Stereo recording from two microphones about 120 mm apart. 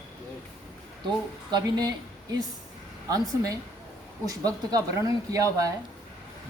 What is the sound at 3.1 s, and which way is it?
Speech, 30° right (ahead or behind).